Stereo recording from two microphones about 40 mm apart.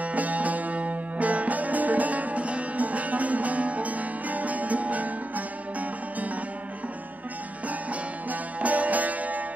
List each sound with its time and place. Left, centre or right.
0.0 s music: right
7.6 s music: right